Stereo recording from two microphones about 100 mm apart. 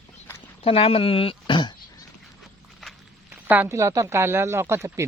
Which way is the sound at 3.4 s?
20° right (ahead or behind).